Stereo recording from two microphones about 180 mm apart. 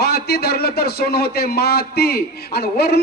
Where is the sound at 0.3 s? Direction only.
65° left (ahead or behind).